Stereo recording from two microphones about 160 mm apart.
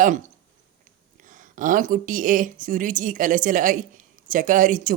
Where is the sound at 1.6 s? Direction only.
55° right (ahead or behind).